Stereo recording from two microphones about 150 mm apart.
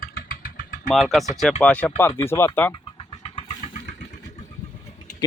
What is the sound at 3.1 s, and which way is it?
Vehicle, 40° left (ahead or behind).